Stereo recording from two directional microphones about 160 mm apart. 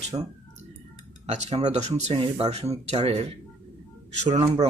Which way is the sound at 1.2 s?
45° right (ahead or behind).